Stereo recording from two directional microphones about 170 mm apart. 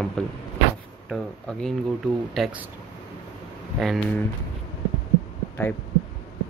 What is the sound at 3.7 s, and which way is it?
Speech, centre (ahead or behind).